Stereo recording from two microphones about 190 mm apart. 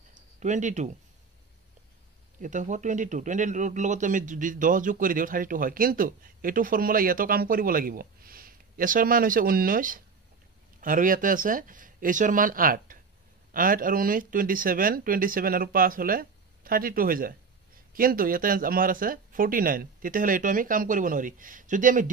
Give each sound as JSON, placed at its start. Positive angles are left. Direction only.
{"t": 0.4, "sound": "speech", "side_deg": -40}
{"t": 2.4, "sound": "speech", "side_deg": -40}